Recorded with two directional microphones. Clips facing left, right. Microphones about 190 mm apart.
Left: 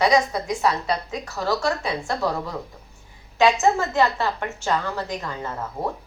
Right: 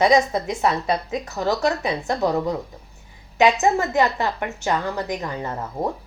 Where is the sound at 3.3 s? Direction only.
15° right (ahead or behind).